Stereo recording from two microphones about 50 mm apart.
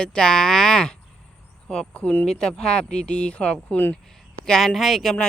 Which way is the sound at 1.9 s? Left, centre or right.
Left.